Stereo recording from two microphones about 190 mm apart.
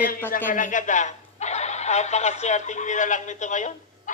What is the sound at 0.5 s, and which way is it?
Speech, 45° left (ahead or behind).